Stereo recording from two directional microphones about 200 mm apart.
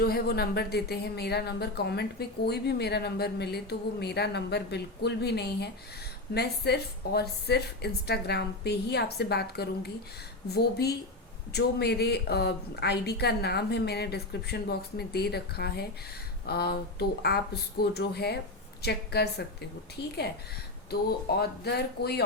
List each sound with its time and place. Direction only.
0.0 s speech: 50° left (ahead or behind)
20.9 s speech: 50° left (ahead or behind)